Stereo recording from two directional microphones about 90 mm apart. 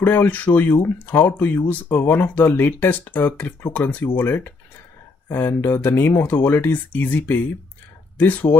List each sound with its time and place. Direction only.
0.0 s speech: 20° left (ahead or behind)